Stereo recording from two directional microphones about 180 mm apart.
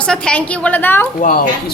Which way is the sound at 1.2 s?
50° left (ahead or behind).